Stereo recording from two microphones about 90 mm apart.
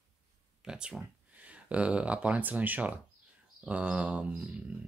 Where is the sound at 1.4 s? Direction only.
15° right (ahead or behind).